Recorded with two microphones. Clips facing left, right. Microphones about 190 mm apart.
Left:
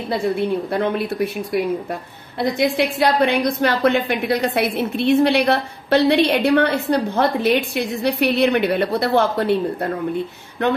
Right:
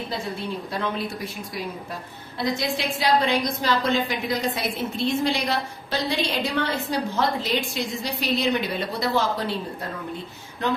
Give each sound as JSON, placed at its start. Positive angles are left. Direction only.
{"t": 0.1, "sound": "a woman's voice", "side_deg": 60}